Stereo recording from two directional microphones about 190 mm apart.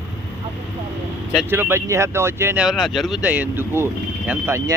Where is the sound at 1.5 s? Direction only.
10° right (ahead or behind).